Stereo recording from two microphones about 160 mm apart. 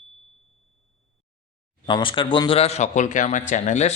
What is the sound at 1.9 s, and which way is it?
A man's voice, 30° left (ahead or behind).